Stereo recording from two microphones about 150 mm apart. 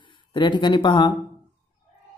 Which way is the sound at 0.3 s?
30° left (ahead or behind).